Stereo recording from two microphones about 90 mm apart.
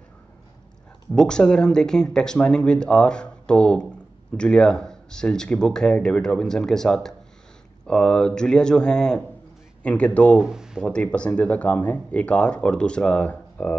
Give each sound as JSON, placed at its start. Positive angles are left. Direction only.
{"t": 1.1, "sound": "speech", "side_deg": 10}
{"t": 10.4, "sound": "speech", "side_deg": -5}
{"t": 10.8, "sound": "speech", "side_deg": 10}